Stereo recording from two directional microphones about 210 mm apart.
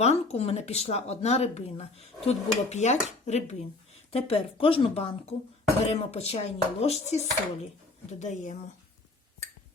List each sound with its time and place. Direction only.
0.0 s speech: 30° left (ahead or behind)